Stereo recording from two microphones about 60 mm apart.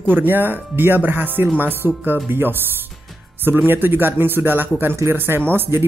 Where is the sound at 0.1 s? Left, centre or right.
Right.